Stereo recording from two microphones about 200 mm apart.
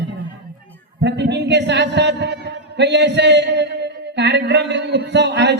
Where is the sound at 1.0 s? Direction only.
60° right (ahead or behind).